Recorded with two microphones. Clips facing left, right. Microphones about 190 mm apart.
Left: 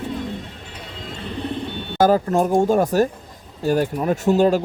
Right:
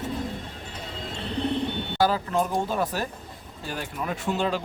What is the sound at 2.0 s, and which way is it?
Speech, 45° left (ahead or behind).